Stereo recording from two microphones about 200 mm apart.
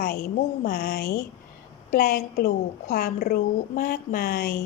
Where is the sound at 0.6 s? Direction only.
50° left (ahead or behind).